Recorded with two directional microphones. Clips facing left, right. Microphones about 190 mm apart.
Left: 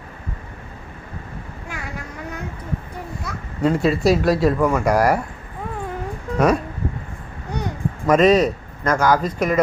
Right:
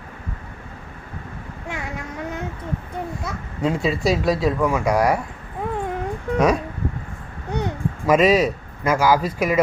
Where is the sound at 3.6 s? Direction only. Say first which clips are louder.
Left 3 dB; centre (ahead or behind).